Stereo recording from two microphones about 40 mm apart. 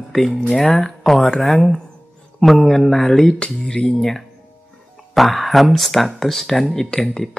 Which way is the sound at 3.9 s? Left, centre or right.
Centre.